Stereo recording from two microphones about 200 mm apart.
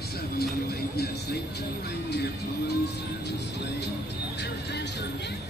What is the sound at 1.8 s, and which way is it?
Speech, 55° left (ahead or behind).